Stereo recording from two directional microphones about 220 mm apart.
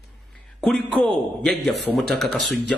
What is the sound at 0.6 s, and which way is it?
A man's voice, 5° left (ahead or behind).